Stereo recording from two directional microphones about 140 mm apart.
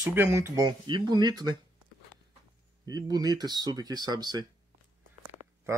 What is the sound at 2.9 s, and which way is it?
Speech, 30° right (ahead or behind).